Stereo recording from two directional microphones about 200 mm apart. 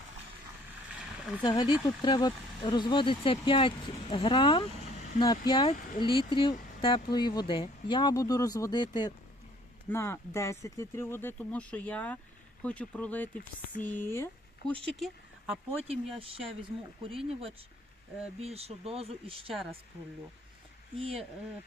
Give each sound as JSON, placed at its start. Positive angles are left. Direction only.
{"t": 0.9, "sound": "a sound", "side_deg": -5}
{"t": 1.4, "sound": "speech", "side_deg": 20}
{"t": 5.7, "sound": "speech", "side_deg": 45}
{"t": 6.0, "sound": "speech", "side_deg": 25}
{"t": 14.7, "sound": "speech", "side_deg": 0}
{"t": 15.8, "sound": "speech", "side_deg": -30}
{"t": 20.9, "sound": "speech", "side_deg": -30}